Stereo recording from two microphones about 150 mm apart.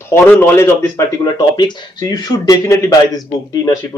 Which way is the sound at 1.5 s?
30° left (ahead or behind).